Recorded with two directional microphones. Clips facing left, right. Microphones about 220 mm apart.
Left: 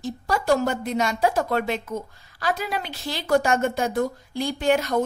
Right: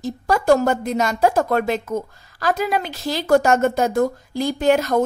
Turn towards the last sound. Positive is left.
turn(degrees=-45)  # may be behind; listen again after turning